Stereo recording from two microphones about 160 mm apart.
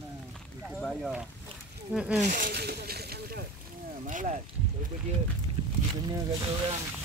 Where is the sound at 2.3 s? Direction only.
75° right (ahead or behind).